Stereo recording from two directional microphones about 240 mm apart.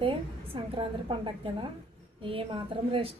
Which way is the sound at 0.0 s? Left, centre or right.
Right.